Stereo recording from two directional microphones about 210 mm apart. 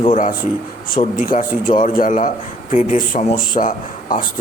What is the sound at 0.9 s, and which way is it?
Speech, 40° left (ahead or behind).